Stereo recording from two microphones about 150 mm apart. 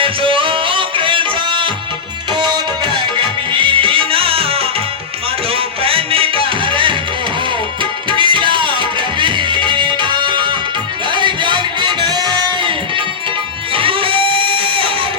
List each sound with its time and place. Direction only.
0.0 s music: 35° right (ahead or behind)
13.7 s music: 35° right (ahead or behind)